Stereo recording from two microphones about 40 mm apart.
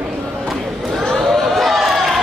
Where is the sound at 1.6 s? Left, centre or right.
Centre.